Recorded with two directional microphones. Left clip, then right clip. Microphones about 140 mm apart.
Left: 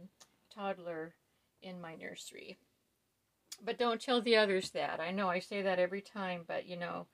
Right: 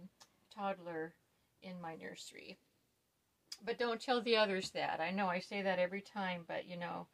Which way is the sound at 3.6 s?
35° left (ahead or behind).